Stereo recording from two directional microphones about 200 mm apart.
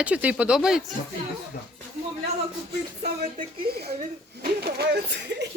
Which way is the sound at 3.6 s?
50° right (ahead or behind).